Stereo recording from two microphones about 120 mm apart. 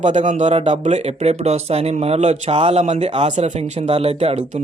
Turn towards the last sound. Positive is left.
turn(degrees=-55)  # may be behind; listen again after turning